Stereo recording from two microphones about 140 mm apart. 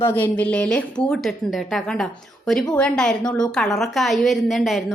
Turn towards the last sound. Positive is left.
turn(degrees=0)  # may be behind; listen again after turning